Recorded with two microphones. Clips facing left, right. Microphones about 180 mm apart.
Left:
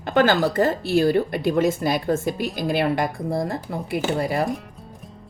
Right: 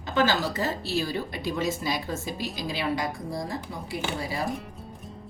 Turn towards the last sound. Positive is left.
turn(degrees=60)  # may be behind; listen again after turning